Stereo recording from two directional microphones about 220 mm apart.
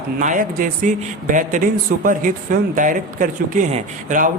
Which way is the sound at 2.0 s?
35° right (ahead or behind).